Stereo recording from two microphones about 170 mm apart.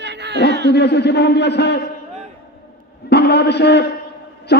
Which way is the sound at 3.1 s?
75° left (ahead or behind).